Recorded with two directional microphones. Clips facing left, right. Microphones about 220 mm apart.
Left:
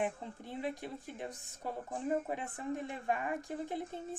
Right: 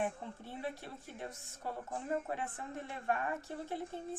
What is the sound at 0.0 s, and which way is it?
A woman's voice, 15° left (ahead or behind).